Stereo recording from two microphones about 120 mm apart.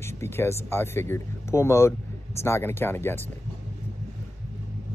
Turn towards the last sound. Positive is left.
turn(degrees=20)  # may be behind; listen again after turning